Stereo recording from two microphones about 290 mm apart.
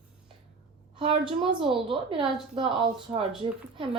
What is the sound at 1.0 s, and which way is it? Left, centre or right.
A woman's voice, centre.